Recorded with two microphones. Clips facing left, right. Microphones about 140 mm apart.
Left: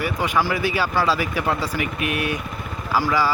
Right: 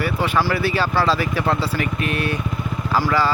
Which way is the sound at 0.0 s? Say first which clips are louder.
Right 2 dB; 15° left (ahead or behind).